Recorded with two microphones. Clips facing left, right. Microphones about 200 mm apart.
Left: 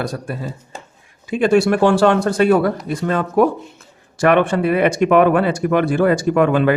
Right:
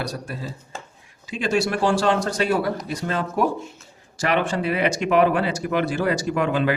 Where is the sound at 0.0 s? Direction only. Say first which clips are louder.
Left 5 dB; 50° left (ahead or behind).